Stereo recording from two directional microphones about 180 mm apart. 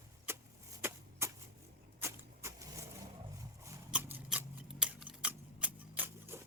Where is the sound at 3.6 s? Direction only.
10° right (ahead or behind).